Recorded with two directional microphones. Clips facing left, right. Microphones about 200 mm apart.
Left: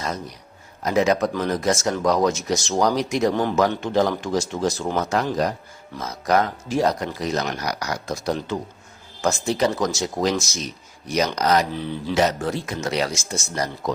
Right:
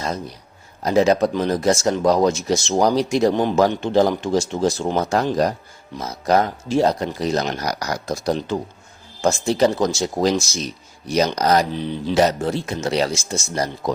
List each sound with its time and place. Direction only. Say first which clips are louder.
0.8 s speech: right 3 dB; 30° right (ahead or behind)
11.7 s speech: right 3 dB; 20° right (ahead or behind)
12.1 s speech: right 3 dB; 30° right (ahead or behind)